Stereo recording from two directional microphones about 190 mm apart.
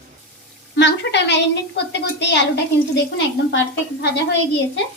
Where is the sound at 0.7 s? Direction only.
65° left (ahead or behind).